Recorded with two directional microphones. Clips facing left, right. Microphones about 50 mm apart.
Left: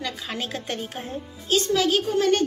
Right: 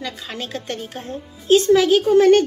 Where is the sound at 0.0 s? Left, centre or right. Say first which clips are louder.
Right 1 dB; centre.